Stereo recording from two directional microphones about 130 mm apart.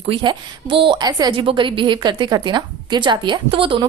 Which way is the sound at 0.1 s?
35° right (ahead or behind).